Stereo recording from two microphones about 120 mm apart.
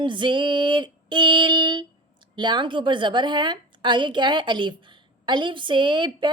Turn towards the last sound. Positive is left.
turn(degrees=-40)  # may be behind; listen again after turning